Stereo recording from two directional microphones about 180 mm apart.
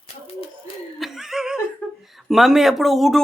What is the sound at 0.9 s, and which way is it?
Chuckle, centre (ahead or behind).